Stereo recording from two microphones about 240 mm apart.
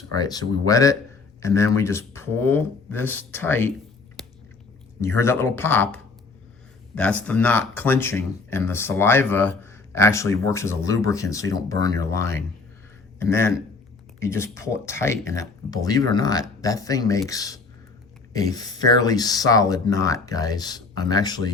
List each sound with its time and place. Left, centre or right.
0.1 s speech: centre
4.2 s biting: centre
4.9 s a man's voice: centre